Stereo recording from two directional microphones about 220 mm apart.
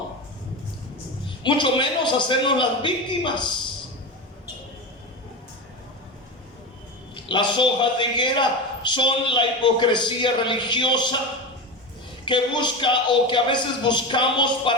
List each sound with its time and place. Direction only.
1.5 s a man's voice: 20° left (ahead or behind)
7.3 s a man's voice: 20° left (ahead or behind)
12.2 s a man's voice: 20° left (ahead or behind)